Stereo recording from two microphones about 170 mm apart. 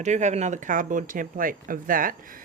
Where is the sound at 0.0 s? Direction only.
45° right (ahead or behind).